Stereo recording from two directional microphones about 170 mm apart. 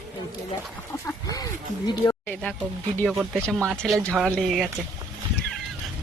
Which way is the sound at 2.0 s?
10° left (ahead or behind).